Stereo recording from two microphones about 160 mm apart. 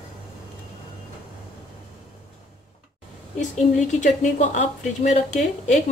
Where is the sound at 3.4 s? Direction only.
50° left (ahead or behind).